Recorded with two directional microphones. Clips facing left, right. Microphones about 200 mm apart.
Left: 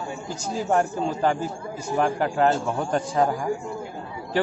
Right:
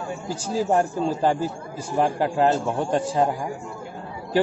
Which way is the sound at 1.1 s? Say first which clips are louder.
Right 2 dB; 35° right (ahead or behind).